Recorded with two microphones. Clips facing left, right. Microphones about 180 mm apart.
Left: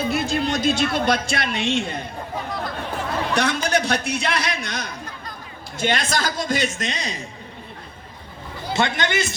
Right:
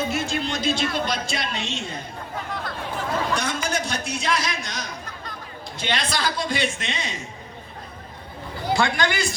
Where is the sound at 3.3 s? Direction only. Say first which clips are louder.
Left 4 dB; 70° left (ahead or behind).